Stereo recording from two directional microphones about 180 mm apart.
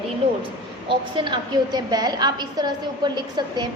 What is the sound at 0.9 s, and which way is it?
A woman's voice, 25° right (ahead or behind).